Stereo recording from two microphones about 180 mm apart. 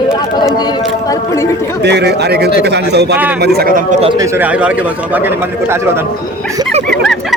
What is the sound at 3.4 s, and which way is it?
Speech, 60° right (ahead or behind).